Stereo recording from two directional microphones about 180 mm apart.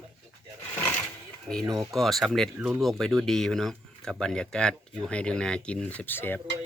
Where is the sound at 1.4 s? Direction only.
5° left (ahead or behind).